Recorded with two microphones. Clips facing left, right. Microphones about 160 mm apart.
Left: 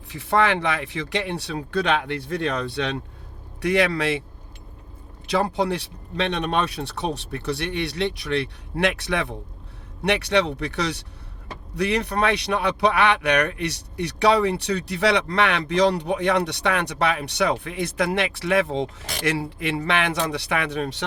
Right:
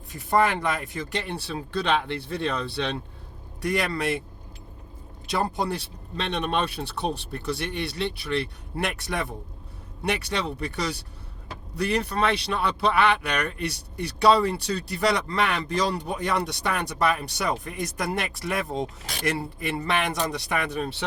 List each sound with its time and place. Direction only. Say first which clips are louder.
0.1 s speech: left 2 dB; 65° left (ahead or behind)
2.5 s speech: left 1 dB; 50° left (ahead or behind)
3.6 s speech: left 5 dB; 65° left (ahead or behind)
5.3 s speech: left 4 dB; 65° left (ahead or behind)